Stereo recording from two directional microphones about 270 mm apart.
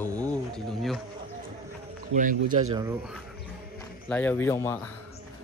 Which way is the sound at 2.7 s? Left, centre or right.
Centre.